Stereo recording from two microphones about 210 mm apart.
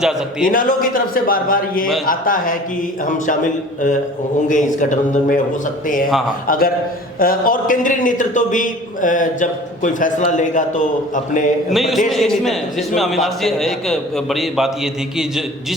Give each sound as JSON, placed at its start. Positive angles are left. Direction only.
{"t": 0.0, "sound": "a man's voice", "side_deg": 0}
{"t": 0.4, "sound": "a man's voice", "side_deg": 40}
{"t": 6.5, "sound": "a man's voice", "side_deg": 40}
{"t": 11.7, "sound": "a man's voice", "side_deg": 0}